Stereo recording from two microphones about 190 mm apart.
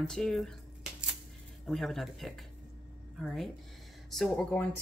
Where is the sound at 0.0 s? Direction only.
5° left (ahead or behind).